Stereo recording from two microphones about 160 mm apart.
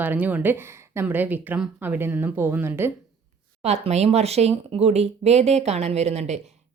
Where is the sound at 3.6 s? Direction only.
40° right (ahead or behind).